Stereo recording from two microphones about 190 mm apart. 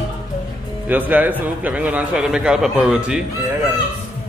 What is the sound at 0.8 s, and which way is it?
A man's voice, 10° right (ahead or behind).